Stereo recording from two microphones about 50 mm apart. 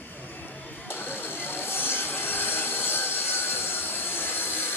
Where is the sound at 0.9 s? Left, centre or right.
Left.